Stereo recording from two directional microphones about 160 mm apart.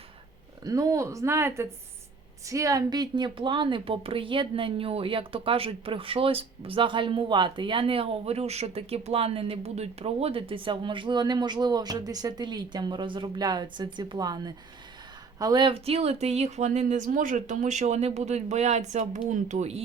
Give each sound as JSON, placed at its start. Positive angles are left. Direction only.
{"t": 0.6, "sound": "a woman's voice", "side_deg": -20}